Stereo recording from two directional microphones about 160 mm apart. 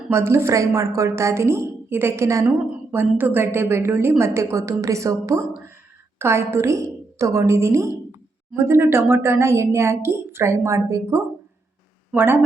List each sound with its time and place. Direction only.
0.1 s a woman's voice: 15° right (ahead or behind)